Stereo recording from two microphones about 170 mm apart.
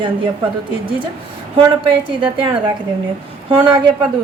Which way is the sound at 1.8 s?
30° right (ahead or behind).